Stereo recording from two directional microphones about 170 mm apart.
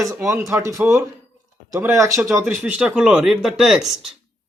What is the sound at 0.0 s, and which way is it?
Speech, 20° right (ahead or behind).